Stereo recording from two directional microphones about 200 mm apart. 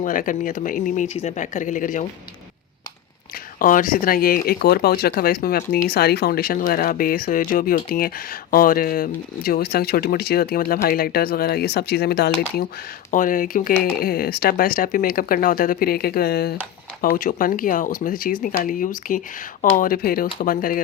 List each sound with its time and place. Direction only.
0.0 s speech: 40° left (ahead or behind)
3.6 s speech: 40° left (ahead or behind)
13.1 s speech: 40° left (ahead or behind)